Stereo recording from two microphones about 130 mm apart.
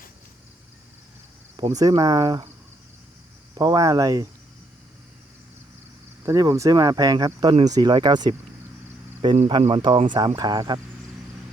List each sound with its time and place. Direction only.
1.6 s speech: 30° right (ahead or behind)
3.5 s speech: 30° right (ahead or behind)
6.2 s speech: 25° right (ahead or behind)
9.5 s speech: 45° right (ahead or behind)